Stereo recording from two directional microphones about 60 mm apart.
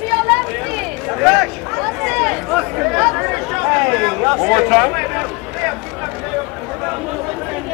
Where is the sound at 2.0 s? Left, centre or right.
Centre.